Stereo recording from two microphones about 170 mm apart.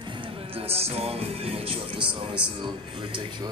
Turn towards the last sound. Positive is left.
turn(degrees=-30)  # may be behind; listen again after turning